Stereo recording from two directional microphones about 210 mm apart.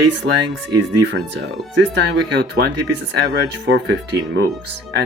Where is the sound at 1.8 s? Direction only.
55° right (ahead or behind).